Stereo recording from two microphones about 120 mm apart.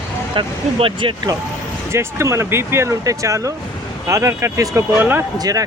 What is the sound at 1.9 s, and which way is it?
Speech, 25° right (ahead or behind).